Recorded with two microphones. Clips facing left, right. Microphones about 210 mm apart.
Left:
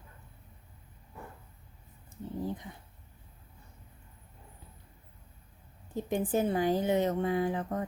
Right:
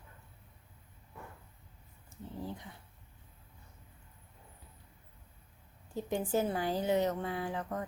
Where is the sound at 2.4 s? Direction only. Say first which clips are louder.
Left 6 dB; 20° left (ahead or behind).